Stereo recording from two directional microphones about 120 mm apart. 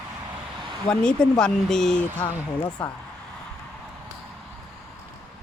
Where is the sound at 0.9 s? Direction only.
5° left (ahead or behind).